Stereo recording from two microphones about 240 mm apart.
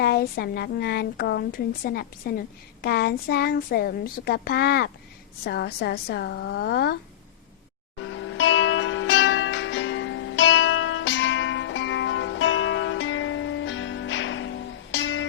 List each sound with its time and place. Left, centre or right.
0.0 s a woman's voice: left
7.9 s music: left